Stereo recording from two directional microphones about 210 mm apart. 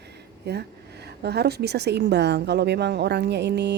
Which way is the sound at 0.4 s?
50° right (ahead or behind).